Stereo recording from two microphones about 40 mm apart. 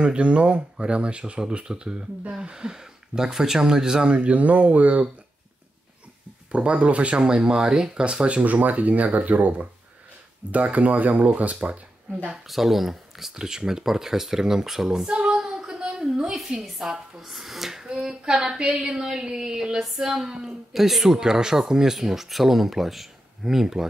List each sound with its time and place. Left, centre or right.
0.0 s speech: right
4.1 s speech: right
6.5 s speech: right
7.2 s speech: centre
8.5 s speech: right
12.4 s speech: centre
15.0 s a sound: right
16.6 s speech: centre
17.8 s speech: right
18.8 s speech: centre
19.8 s speech: centre
20.1 s speech: centre